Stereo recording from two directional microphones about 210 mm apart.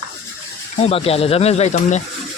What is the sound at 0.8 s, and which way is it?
Speech, 30° left (ahead or behind).